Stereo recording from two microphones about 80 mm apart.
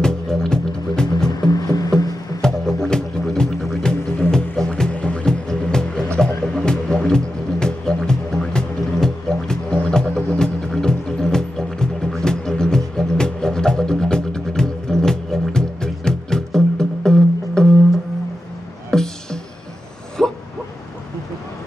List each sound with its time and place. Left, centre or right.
0.0 s music: centre
1.5 s music: left
2.4 s music: centre
18.9 s music: centre
20.2 s a sound: centre